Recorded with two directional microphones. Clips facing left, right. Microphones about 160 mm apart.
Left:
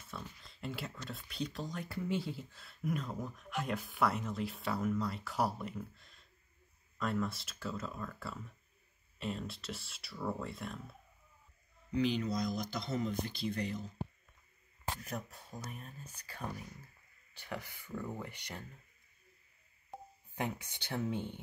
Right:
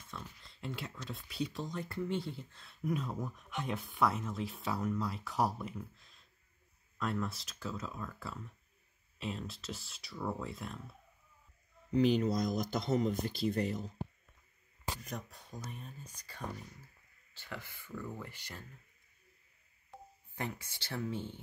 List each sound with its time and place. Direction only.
0.1 s speech: centre (ahead or behind)
11.9 s speech: 45° right (ahead or behind)
15.0 s speech: 5° left (ahead or behind)
20.3 s speech: 15° left (ahead or behind)